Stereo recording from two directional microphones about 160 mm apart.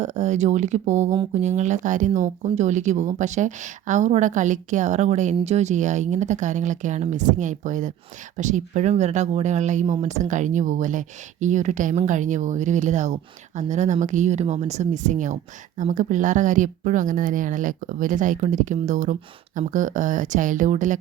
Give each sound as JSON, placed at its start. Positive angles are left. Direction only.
{"t": 0.0, "sound": "speech", "side_deg": -45}